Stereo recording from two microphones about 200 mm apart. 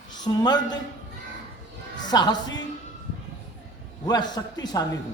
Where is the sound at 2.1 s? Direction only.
20° left (ahead or behind).